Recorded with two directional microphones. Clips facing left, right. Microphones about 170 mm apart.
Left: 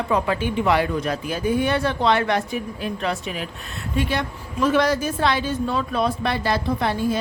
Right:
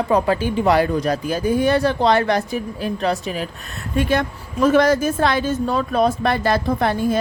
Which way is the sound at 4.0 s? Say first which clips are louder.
Right 5 dB; 45° right (ahead or behind).